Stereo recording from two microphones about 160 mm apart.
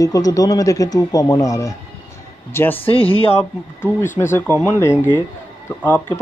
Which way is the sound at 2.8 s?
35° left (ahead or behind).